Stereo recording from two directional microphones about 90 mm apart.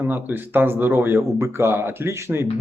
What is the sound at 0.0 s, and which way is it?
Speech, 25° right (ahead or behind).